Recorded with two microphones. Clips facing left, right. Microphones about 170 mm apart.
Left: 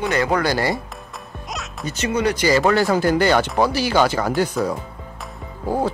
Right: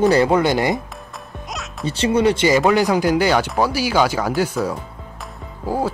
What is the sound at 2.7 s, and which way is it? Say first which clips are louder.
Speech: right 1 dB; 15° right (ahead or behind).